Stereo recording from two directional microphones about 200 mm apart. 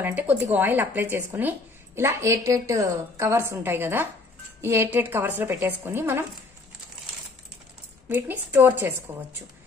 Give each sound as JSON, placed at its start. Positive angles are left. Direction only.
{"t": 0.0, "sound": "a woman's voice", "side_deg": -10}
{"t": 8.1, "sound": "a woman's voice", "side_deg": -10}